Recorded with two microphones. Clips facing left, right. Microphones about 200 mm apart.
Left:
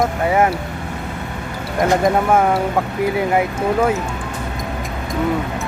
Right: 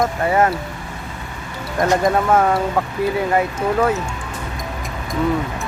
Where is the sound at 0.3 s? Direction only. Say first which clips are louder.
Left 1 dB; 10° left (ahead or behind).